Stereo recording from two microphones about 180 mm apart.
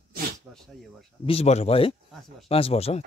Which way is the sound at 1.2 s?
35° left (ahead or behind).